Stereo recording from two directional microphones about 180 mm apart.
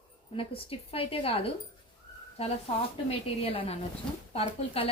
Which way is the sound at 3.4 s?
30° left (ahead or behind).